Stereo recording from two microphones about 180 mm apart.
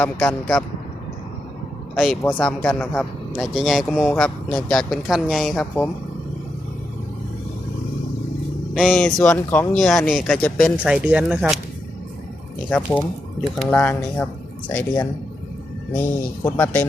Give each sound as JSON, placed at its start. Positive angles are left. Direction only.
{"t": 0.0, "sound": "speech", "side_deg": 5}
{"t": 2.0, "sound": "speech", "side_deg": 5}
{"t": 8.7, "sound": "speech", "side_deg": 0}
{"t": 10.8, "sound": "speech", "side_deg": -5}
{"t": 12.7, "sound": "speech", "side_deg": 10}
{"t": 16.0, "sound": "speech", "side_deg": 10}